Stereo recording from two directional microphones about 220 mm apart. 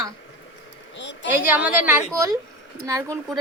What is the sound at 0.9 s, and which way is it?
Speech, 55° left (ahead or behind).